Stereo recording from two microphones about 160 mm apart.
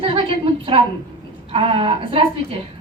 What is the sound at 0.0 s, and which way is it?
A woman's voice, 30° right (ahead or behind).